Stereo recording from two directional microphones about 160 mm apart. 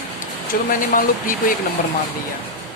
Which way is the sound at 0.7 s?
60° left (ahead or behind).